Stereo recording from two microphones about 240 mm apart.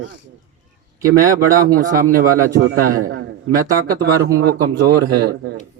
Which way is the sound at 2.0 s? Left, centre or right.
Right.